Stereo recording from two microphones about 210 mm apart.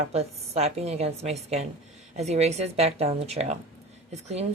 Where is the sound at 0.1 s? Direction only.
30° right (ahead or behind).